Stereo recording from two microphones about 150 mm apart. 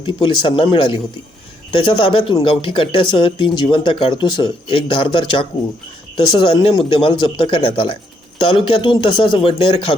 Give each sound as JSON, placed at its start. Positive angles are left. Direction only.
{"t": 0.0, "sound": "speech", "side_deg": 35}